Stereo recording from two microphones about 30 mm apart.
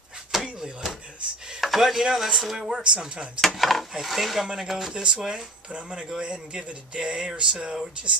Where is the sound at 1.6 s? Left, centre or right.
Centre.